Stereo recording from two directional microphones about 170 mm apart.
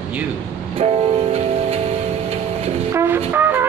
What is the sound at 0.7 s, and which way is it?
Music, 35° right (ahead or behind).